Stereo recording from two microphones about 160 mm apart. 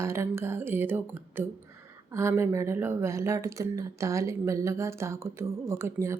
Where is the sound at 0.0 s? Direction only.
15° right (ahead or behind).